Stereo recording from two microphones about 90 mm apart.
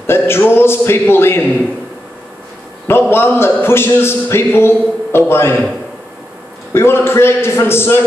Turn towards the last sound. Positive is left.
turn(degrees=25)  # may be behind; listen again after turning